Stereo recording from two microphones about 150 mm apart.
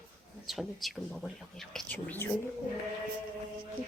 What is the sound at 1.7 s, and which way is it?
Speech, 10° left (ahead or behind).